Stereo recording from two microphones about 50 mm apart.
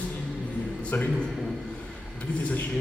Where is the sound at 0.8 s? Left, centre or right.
Left.